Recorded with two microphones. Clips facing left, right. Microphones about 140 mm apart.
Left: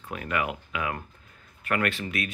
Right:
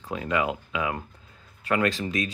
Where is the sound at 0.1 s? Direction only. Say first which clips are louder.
Right 3 dB; 20° right (ahead or behind).